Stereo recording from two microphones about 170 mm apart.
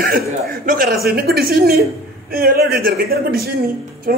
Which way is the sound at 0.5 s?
60° right (ahead or behind).